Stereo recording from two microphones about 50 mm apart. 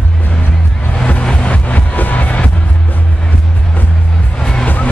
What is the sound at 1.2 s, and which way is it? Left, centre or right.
Music, left.